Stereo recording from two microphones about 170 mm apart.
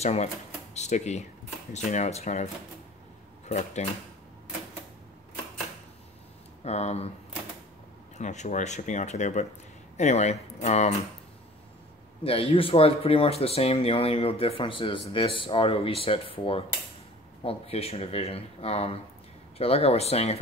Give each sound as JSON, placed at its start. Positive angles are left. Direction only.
{"t": 0.0, "sound": "speech", "side_deg": 40}
{"t": 6.6, "sound": "speech", "side_deg": 40}
{"t": 8.2, "sound": "speech", "side_deg": 45}
{"t": 12.2, "sound": "speech", "side_deg": 35}